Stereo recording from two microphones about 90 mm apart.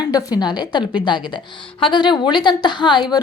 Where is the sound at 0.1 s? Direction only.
45° left (ahead or behind).